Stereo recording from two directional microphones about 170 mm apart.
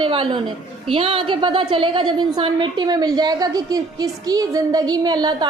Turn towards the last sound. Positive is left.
turn(degrees=-25)  # may be behind; listen again after turning